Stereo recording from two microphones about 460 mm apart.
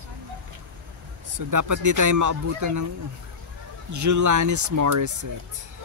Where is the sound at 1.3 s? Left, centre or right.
Right.